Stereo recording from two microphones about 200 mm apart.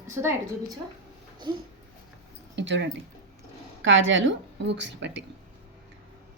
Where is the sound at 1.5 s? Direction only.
20° right (ahead or behind).